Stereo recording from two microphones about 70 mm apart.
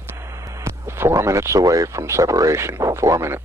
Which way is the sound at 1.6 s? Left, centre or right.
Right.